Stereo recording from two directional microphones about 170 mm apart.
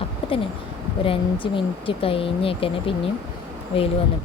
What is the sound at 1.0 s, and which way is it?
Speech, 30° left (ahead or behind).